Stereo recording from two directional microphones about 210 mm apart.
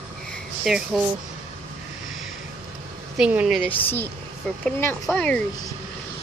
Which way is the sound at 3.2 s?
5° right (ahead or behind).